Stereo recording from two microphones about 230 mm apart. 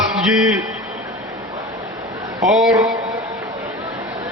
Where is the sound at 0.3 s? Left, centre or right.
Centre.